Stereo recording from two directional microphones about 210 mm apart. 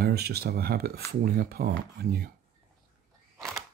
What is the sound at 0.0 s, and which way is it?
Speech, 50° right (ahead or behind).